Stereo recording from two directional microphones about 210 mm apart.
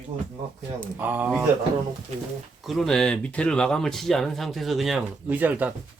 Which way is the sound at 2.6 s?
Centre (ahead or behind).